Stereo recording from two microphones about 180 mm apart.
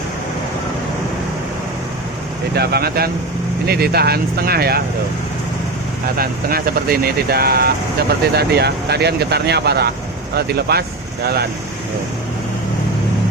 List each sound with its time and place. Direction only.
2.6 s speech: 60° right (ahead or behind)
6.1 s speech: 55° right (ahead or behind)